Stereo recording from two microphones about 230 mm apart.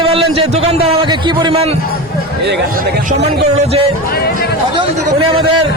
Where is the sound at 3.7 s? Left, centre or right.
Right.